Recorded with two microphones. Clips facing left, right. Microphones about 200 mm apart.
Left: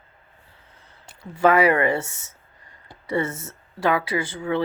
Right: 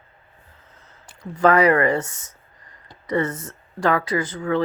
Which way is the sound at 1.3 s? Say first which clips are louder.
Right 1 dB; 5° left (ahead or behind).